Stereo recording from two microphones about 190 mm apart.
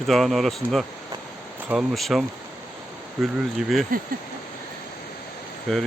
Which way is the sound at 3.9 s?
50° right (ahead or behind).